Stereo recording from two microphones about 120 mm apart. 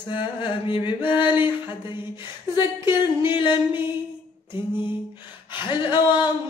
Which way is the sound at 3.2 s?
40° left (ahead or behind).